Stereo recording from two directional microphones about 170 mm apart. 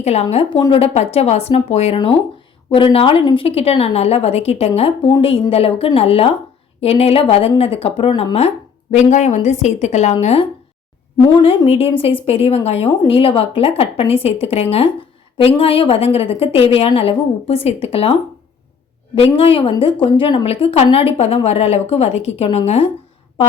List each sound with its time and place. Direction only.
0.0 s speech: 40° left (ahead or behind)
11.4 s speech: 35° left (ahead or behind)